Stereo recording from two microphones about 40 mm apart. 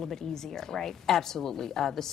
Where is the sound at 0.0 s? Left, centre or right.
Centre.